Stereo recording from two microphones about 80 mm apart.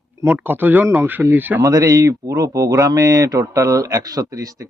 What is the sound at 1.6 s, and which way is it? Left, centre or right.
Speech, right.